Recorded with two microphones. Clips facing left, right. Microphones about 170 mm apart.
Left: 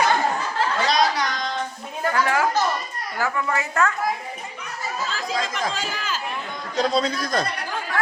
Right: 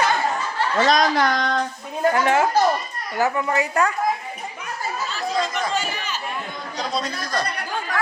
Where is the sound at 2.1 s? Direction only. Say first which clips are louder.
Right 3 dB; 25° right (ahead or behind).